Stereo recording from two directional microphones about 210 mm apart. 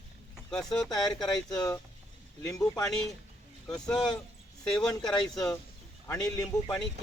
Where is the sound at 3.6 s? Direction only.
5° left (ahead or behind).